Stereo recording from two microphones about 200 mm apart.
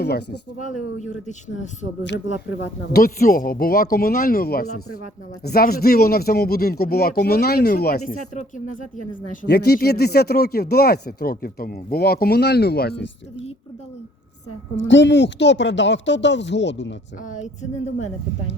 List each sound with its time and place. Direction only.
0.0 s speech: 55° left (ahead or behind)
0.6 s speech: 35° left (ahead or behind)
2.9 s speech: 45° left (ahead or behind)
4.6 s speech: 90° left
5.4 s speech: 50° left (ahead or behind)
14.8 s a woman's voice: 65° left (ahead or behind)
17.2 s speech: 35° left (ahead or behind)